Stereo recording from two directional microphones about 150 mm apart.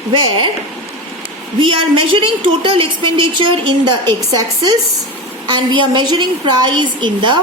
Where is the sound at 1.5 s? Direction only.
35° right (ahead or behind).